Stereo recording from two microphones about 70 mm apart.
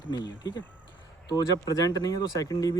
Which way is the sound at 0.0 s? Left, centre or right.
Left.